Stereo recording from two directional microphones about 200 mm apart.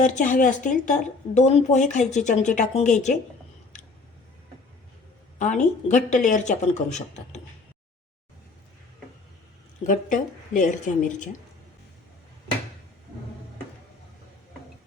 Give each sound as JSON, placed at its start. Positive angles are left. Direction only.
{"t": 0.0, "sound": "speech", "side_deg": 40}
{"t": 5.4, "sound": "speech", "side_deg": 35}
{"t": 9.8, "sound": "speech", "side_deg": 40}